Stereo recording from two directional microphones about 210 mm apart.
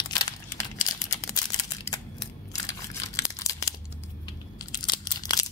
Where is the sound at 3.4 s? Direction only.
15° left (ahead or behind).